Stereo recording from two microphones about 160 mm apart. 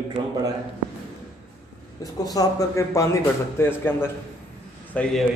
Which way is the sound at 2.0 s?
25° left (ahead or behind).